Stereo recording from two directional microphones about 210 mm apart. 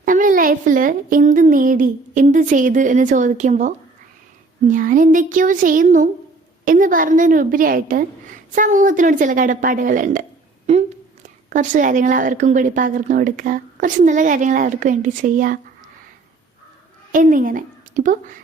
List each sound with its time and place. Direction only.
0.0 s a woman's voice: 40° right (ahead or behind)
17.1 s a woman's voice: 40° right (ahead or behind)